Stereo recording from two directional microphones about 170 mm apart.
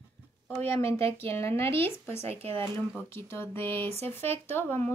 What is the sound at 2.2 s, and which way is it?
Speech, 35° right (ahead or behind).